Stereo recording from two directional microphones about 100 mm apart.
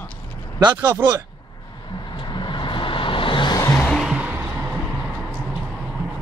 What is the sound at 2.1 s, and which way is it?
Vehicle, 50° left (ahead or behind).